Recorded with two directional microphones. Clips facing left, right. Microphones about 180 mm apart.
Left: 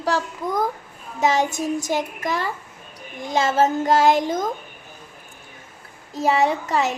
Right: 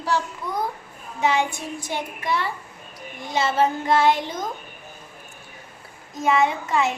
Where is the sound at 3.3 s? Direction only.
45° left (ahead or behind).